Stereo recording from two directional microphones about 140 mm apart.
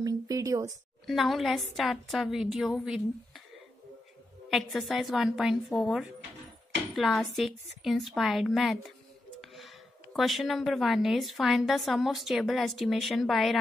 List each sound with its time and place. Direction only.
0.0 s a sound: 25° right (ahead or behind)
1.0 s a woman's voice: centre (ahead or behind)
4.5 s a woman's voice: centre (ahead or behind)